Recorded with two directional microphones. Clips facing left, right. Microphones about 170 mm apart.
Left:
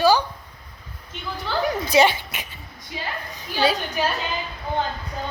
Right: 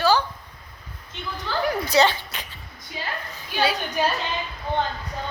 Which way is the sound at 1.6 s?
20° left (ahead or behind).